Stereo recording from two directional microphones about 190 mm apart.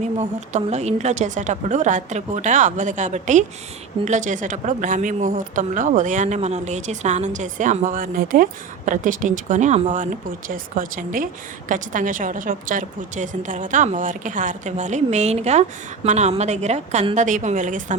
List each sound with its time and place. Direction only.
0.2 s a woman's voice: 35° right (ahead or behind)